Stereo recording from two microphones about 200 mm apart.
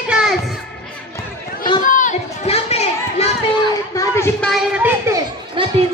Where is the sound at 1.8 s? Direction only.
40° left (ahead or behind).